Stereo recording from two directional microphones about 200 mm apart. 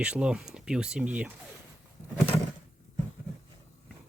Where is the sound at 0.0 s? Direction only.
5° right (ahead or behind).